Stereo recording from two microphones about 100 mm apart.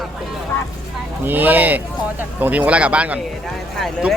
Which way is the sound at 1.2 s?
20° right (ahead or behind).